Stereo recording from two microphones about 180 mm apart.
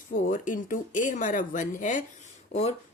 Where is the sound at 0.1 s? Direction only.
50° left (ahead or behind).